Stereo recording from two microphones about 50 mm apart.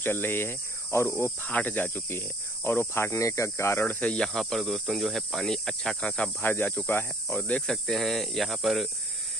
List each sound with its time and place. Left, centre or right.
0.0 s cricket: left
1.4 s cricket: left
4.0 s cricket: left
4.3 s cricket: centre
6.4 s speech: left
7.2 s cricket: left
7.7 s cricket: centre